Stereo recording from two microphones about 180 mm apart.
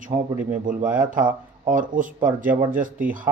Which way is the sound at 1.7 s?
50° right (ahead or behind).